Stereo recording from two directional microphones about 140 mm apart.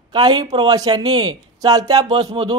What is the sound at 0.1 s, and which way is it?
A man's voice, 30° right (ahead or behind).